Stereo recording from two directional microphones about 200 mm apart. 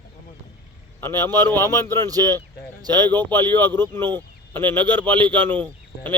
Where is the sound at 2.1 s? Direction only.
20° right (ahead or behind).